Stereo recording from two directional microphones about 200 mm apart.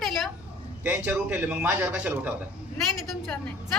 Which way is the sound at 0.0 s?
Centre (ahead or behind).